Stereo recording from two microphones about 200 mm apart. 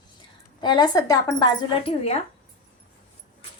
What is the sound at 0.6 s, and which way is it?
Speech, 20° left (ahead or behind).